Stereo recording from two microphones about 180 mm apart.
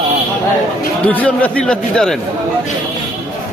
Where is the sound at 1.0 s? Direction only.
5° left (ahead or behind).